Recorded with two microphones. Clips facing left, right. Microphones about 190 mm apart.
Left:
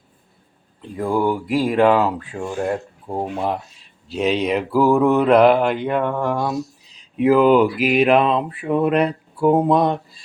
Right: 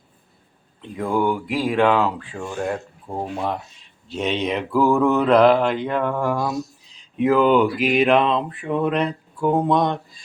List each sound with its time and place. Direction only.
0.8 s speech: centre (ahead or behind)
4.1 s speech: 5° left (ahead or behind)